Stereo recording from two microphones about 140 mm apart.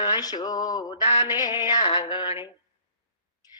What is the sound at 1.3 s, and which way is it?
Music, 30° left (ahead or behind).